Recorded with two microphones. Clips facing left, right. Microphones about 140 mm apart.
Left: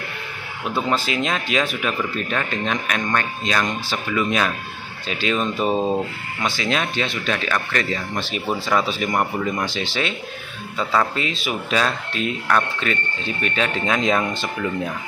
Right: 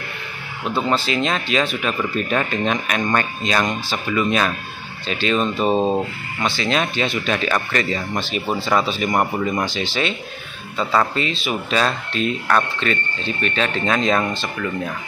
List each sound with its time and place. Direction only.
0.8 s speech: 10° left (ahead or behind)
2.3 s speech: 10° right (ahead or behind); by 5.5 s 5° left (ahead or behind)
5.6 s speech: 25° right (ahead or behind)
6.4 s speech: 5° left (ahead or behind)
6.8 s speech: 5° right (ahead or behind)
9.1 s speech: 10° right (ahead or behind)
9.7 s speech: centre (ahead or behind)